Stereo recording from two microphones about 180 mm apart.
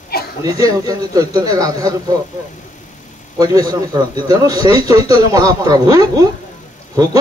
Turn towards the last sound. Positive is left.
turn(degrees=-20)  # may be behind; listen again after turning